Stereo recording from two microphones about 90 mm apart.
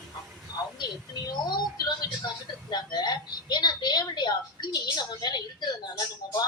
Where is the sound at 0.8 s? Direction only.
50° left (ahead or behind).